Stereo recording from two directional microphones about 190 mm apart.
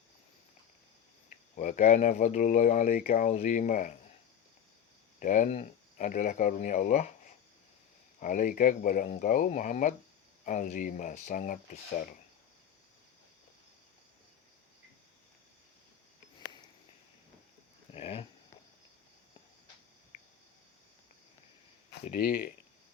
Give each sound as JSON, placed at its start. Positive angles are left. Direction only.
{"t": 1.5, "sound": "speech", "side_deg": 40}
{"t": 5.2, "sound": "speech", "side_deg": 40}
{"t": 8.2, "sound": "speech", "side_deg": 45}
{"t": 17.9, "sound": "a sound", "side_deg": 30}
{"t": 22.0, "sound": "speech", "side_deg": 50}